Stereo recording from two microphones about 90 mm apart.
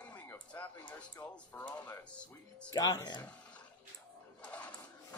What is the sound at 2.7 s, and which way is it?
Speech, 45° left (ahead or behind).